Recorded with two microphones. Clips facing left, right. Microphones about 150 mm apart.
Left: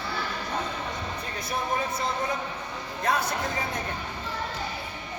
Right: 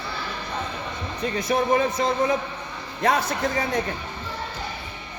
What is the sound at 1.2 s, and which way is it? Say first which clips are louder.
Speech: right 12 dB; 90° right.